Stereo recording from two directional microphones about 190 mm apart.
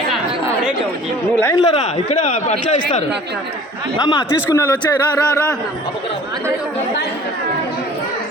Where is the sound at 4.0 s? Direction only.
25° left (ahead or behind).